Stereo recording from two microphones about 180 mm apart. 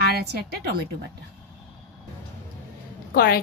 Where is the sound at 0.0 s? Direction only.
60° right (ahead or behind).